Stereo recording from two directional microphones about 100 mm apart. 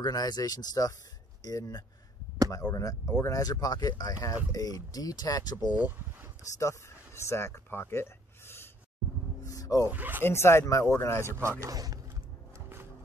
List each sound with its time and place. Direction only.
0.0 s speech: 40° left (ahead or behind)
5.7 s speech: 15° right (ahead or behind)
7.2 s speech: 25° left (ahead or behind)
9.4 s a sound: 35° left (ahead or behind)
9.8 s speech: 20° right (ahead or behind)
10.2 s speech: 25° left (ahead or behind)
11.6 s speech: 40° right (ahead or behind)
12.5 s music: 25° right (ahead or behind)